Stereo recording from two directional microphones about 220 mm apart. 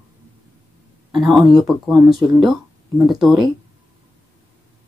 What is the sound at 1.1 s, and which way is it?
Speech, centre (ahead or behind).